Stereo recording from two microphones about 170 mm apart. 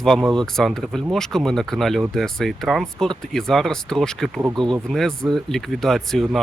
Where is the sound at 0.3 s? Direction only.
Centre (ahead or behind).